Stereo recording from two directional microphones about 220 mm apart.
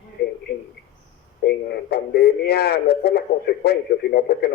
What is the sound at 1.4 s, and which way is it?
A man's voice, 45° left (ahead or behind).